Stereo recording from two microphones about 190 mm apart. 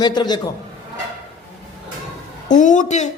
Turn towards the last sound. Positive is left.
turn(degrees=40)  # may be behind; listen again after turning